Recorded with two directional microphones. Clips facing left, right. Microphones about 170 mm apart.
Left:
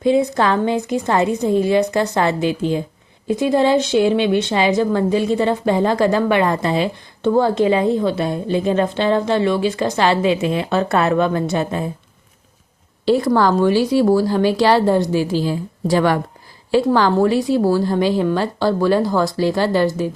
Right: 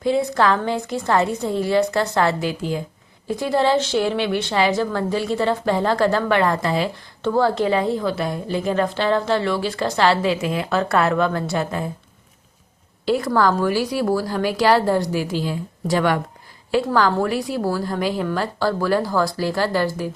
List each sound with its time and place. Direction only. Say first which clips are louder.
0.0 s a woman's voice: left 3 dB; 20° left (ahead or behind)
13.1 s a woman's voice: left 4 dB; 25° left (ahead or behind)